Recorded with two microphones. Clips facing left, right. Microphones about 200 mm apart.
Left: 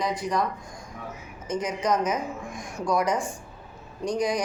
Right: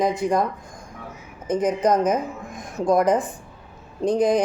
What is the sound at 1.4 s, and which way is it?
A woman's voice, 55° right (ahead or behind).